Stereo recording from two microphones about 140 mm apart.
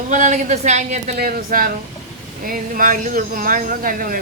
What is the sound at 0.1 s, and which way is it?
Speech, 60° right (ahead or behind).